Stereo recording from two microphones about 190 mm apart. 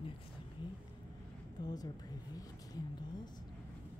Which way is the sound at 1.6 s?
20° left (ahead or behind).